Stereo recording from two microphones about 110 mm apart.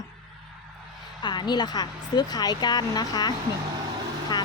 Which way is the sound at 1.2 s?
40° left (ahead or behind).